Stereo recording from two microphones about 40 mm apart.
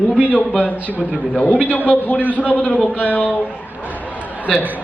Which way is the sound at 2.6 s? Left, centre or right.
Left.